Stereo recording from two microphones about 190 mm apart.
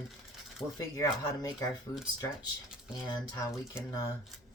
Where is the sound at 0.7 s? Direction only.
15° left (ahead or behind).